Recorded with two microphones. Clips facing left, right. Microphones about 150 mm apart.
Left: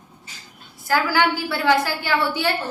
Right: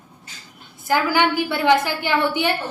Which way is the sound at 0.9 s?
20° right (ahead or behind).